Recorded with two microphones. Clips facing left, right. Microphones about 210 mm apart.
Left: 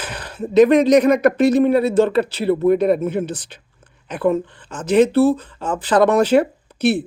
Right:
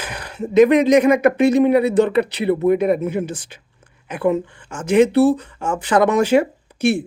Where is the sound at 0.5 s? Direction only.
10° right (ahead or behind).